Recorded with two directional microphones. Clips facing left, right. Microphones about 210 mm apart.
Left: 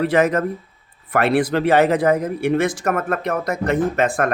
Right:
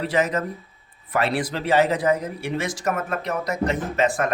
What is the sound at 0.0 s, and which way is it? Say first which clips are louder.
Speech: left 6 dB; 60° left (ahead or behind).